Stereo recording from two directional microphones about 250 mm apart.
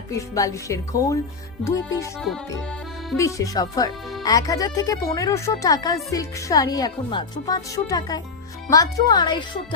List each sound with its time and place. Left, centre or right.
0.2 s speech: centre
3.2 s speech: centre